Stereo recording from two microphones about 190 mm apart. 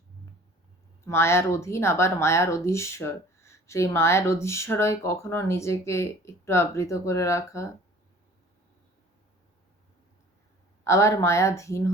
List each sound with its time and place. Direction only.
1.0 s speech: 15° left (ahead or behind)
10.8 s speech: 15° left (ahead or behind)